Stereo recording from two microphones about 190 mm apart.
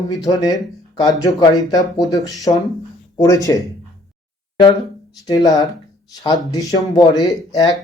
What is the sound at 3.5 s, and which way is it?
Speech, 15° left (ahead or behind).